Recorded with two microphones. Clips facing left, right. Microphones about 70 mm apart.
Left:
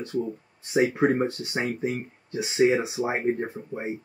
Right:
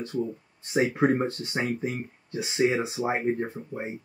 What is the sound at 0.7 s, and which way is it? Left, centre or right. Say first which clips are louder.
Speech: left 1 dB; centre.